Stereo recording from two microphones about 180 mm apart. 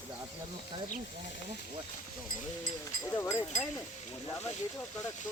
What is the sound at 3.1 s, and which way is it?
Speech, 15° left (ahead or behind).